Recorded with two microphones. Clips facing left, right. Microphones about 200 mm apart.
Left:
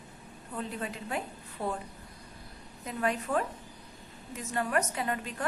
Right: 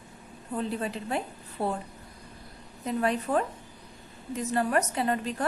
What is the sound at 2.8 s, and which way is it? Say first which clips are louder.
Speech: right 4 dB; 35° right (ahead or behind).